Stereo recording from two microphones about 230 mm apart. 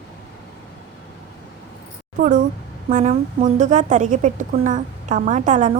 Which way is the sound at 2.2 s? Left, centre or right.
Right.